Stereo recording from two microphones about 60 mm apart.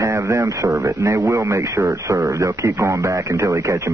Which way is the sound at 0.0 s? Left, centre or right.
Right.